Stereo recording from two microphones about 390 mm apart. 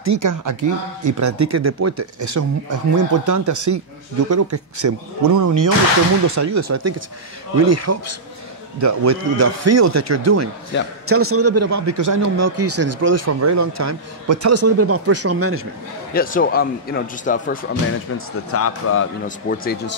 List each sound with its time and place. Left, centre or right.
0.0 s a man's voice: right
16.1 s a man's voice: left
18.1 s speech: left
19.2 s a man's voice: left